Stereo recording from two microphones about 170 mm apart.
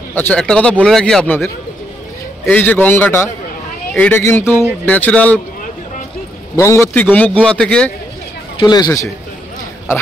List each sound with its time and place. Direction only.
0.1 s a man's voice: 10° left (ahead or behind)
6.5 s a man's voice: 15° left (ahead or behind)
8.5 s speech: 25° left (ahead or behind)